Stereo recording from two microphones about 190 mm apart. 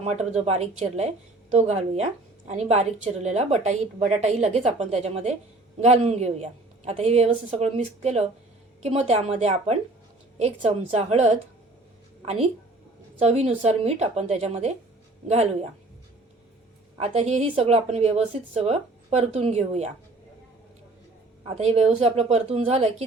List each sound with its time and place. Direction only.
0.0 s a woman's voice: 35° right (ahead or behind)
17.0 s a woman's voice: 35° right (ahead or behind)
21.4 s a woman's voice: 35° right (ahead or behind)